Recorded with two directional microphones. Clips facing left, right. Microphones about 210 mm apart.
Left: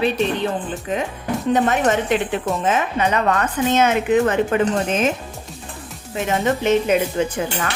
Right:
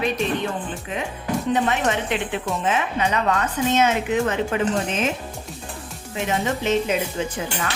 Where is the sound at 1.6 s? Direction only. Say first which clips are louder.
Left 4 dB; 45° left (ahead or behind).